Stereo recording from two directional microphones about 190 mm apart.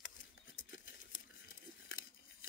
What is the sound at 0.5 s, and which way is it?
Tearing, 45° left (ahead or behind).